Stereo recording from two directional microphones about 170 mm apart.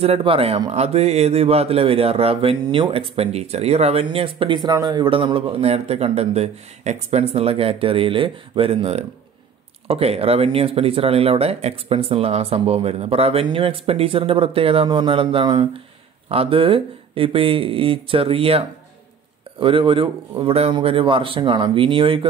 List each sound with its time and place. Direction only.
0.0 s speech: 35° right (ahead or behind)
19.6 s speech: 30° right (ahead or behind)